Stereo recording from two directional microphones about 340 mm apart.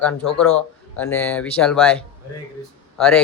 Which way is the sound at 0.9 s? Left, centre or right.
Centre.